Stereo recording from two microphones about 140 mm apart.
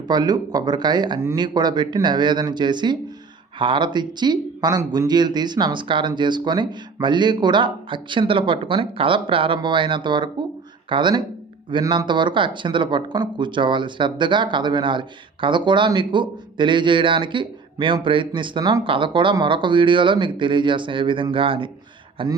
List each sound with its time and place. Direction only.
0.1 s speech: 30° right (ahead or behind)